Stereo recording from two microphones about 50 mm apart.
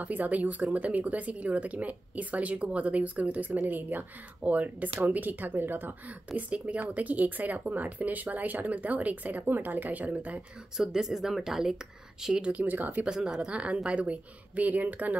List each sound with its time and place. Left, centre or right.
0.0 s speech: right
10.8 s speech: centre
12.5 s speech: right
13.0 s speech: centre; by 15.1 s right